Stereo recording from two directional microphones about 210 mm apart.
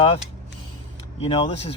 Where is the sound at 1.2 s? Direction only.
25° left (ahead or behind).